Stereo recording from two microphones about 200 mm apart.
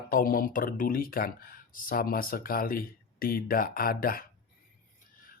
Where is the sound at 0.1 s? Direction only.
45° left (ahead or behind).